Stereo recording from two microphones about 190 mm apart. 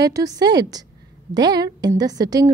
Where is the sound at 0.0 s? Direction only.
20° right (ahead or behind).